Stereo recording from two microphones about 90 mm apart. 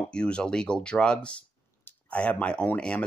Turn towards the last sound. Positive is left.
turn(degrees=15)  # may be behind; listen again after turning